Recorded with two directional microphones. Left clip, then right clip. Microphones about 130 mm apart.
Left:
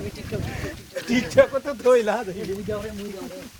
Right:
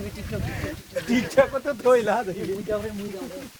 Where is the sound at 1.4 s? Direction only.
35° right (ahead or behind).